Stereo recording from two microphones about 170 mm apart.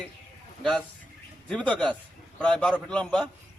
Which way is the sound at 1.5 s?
10° left (ahead or behind).